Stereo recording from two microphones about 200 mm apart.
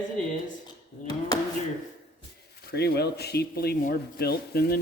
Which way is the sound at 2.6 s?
55° left (ahead or behind).